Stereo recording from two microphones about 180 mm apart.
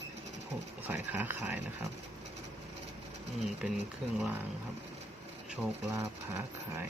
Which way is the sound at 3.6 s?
5° right (ahead or behind).